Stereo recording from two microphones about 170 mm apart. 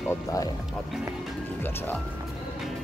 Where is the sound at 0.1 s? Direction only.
20° left (ahead or behind).